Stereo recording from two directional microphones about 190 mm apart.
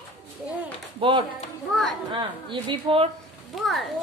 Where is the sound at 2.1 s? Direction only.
25° right (ahead or behind).